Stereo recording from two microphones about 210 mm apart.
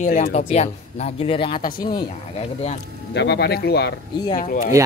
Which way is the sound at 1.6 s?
40° left (ahead or behind).